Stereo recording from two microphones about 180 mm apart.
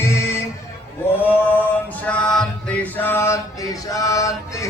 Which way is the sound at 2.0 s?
5° left (ahead or behind).